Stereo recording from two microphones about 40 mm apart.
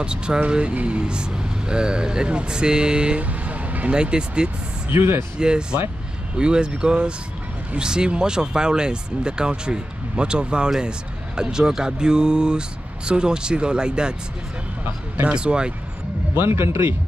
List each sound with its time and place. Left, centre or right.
0.0 s speech: right
3.2 s vehicle: right
3.9 s speech: right
4.9 s a man's voice: right
5.4 s speech: right
15.3 s speech: right
16.3 s a man's voice: right